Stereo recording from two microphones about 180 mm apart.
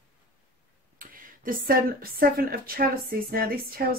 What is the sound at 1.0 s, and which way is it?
Speech, 50° right (ahead or behind).